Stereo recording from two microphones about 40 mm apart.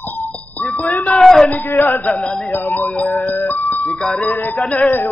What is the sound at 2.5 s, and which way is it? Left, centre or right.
Music, left.